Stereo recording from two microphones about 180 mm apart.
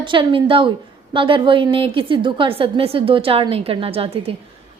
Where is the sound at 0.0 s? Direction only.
25° right (ahead or behind).